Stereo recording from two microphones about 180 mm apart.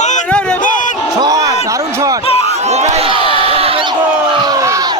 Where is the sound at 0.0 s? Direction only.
40° left (ahead or behind).